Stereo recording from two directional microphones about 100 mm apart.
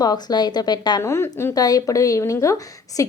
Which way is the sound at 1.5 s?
40° left (ahead or behind).